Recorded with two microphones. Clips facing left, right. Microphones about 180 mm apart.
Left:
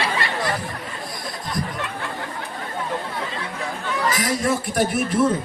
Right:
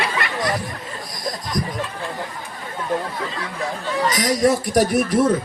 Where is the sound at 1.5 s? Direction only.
40° right (ahead or behind).